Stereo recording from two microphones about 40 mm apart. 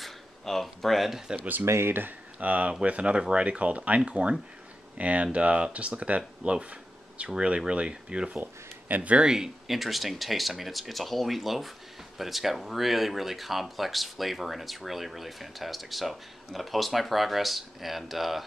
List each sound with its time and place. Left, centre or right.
0.0 s speech: centre
1.6 s speech: right
2.4 s speech: right
6.6 s a sound: right
7.3 s speech: right
8.4 s speech: right
9.1 s speech: right
9.4 s speech: centre